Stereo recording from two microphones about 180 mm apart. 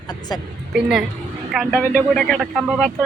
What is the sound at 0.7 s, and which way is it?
Speech, 5° right (ahead or behind).